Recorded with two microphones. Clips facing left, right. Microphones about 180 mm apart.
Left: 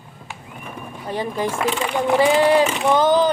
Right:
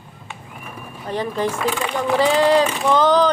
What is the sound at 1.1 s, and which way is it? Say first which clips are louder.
Speech: right 1 dB; 15° left (ahead or behind).